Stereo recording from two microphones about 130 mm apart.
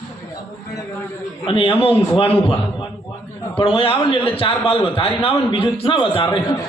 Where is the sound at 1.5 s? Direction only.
40° left (ahead or behind).